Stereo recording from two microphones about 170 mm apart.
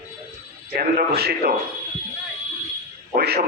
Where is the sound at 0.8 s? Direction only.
65° right (ahead or behind).